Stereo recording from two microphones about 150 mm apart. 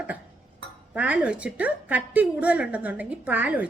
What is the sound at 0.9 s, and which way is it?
A woman's voice, 10° right (ahead or behind).